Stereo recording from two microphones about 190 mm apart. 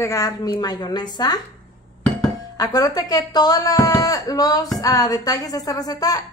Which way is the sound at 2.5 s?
20° left (ahead or behind).